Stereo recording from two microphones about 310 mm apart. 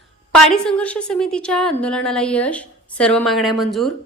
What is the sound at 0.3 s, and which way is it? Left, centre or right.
A woman's voice, centre.